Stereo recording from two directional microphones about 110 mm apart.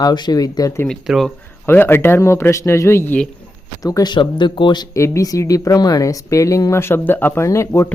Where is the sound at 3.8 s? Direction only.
35° left (ahead or behind).